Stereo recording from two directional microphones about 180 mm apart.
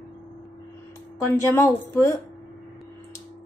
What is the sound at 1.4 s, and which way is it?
Speech, 15° left (ahead or behind).